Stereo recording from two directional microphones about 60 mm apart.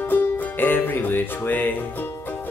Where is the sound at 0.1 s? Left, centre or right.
Left.